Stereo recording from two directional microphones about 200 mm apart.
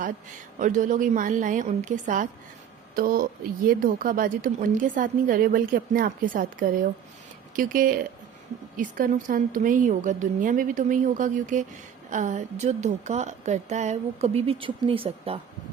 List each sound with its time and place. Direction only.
0.6 s a woman's voice: 40° right (ahead or behind)